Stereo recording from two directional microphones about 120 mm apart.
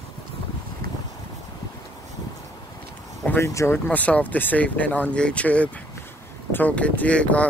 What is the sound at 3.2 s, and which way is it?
Speech, 20° left (ahead or behind).